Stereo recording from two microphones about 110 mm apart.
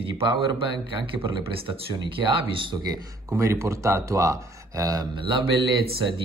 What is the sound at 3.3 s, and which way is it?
Speech, 30° right (ahead or behind).